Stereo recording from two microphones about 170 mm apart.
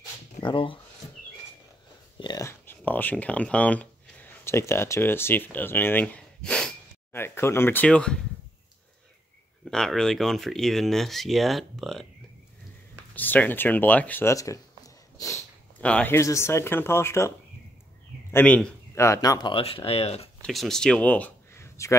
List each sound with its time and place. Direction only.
0.4 s speech: 30° left (ahead or behind)
2.1 s speech: 25° left (ahead or behind); by 8.2 s 5° left (ahead or behind)
9.7 s speech: 5° left (ahead or behind)
13.1 s speech: 10° left (ahead or behind)
15.8 s speech: 10° left (ahead or behind)
18.3 s speech: 10° left (ahead or behind); by 20.2 s 35° left (ahead or behind)
20.4 s speech: centre (ahead or behind)